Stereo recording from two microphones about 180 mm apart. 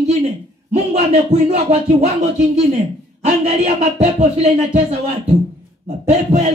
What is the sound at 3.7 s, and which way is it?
Speech, 35° right (ahead or behind).